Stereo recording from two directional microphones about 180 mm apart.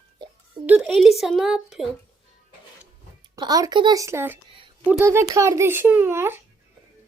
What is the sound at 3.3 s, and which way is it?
A child's voice, 20° right (ahead or behind).